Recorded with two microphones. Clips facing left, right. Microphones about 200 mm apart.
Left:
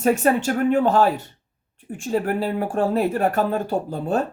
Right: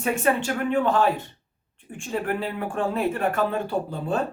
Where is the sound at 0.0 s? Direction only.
40° left (ahead or behind).